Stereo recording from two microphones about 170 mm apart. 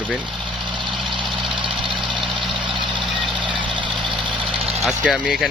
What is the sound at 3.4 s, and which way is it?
Vehicle, 30° right (ahead or behind).